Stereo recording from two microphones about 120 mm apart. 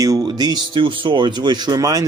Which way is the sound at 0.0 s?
30° right (ahead or behind).